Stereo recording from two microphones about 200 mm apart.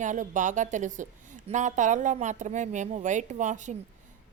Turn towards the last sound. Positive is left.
turn(degrees=-40)  # may be behind; listen again after turning